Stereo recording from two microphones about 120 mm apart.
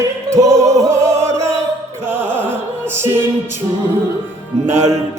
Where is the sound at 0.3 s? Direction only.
25° right (ahead or behind).